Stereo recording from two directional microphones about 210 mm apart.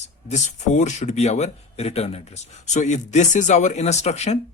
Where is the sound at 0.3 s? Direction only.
35° left (ahead or behind).